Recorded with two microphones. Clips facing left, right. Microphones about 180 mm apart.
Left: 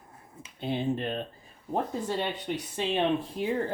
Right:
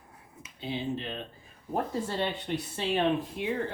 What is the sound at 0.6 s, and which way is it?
Speech, 55° left (ahead or behind).